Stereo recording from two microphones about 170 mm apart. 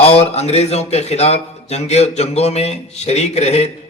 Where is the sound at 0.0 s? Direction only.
35° left (ahead or behind).